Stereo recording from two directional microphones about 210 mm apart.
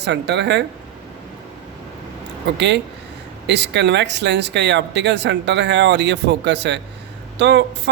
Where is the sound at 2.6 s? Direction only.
55° right (ahead or behind).